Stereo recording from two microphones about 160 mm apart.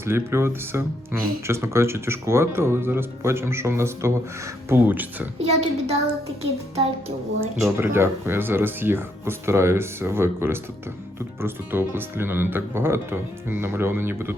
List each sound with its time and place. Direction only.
0.0 s speech: 15° right (ahead or behind)
5.4 s child singing: 40° right (ahead or behind)
7.8 s speech: 15° right (ahead or behind)